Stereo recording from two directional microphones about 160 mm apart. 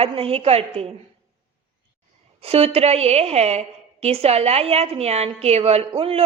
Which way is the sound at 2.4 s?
40° right (ahead or behind).